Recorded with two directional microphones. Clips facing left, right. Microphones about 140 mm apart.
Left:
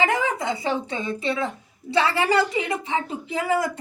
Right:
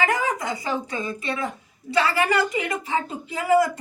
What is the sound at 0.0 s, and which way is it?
A woman's voice, 25° left (ahead or behind).